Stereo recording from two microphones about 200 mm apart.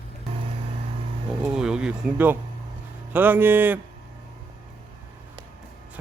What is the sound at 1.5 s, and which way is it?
Speech, 5° right (ahead or behind).